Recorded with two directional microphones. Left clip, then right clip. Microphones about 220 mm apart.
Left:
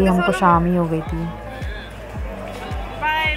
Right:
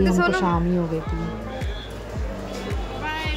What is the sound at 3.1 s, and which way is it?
Music, 5° left (ahead or behind).